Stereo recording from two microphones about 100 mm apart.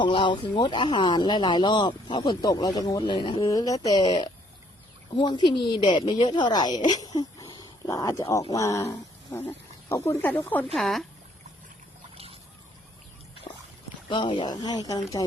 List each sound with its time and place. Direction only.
0.0 s speech: 55° left (ahead or behind)
2.4 s speech: 40° left (ahead or behind)
3.1 s speech: 55° left (ahead or behind)
3.4 s speech: 35° left (ahead or behind); by 10.7 s 15° left (ahead or behind)
10.7 s speech: centre (ahead or behind)
12.1 s a sound: 80° right
14.1 s speech: 55° left (ahead or behind)
14.5 s speech: 40° left (ahead or behind)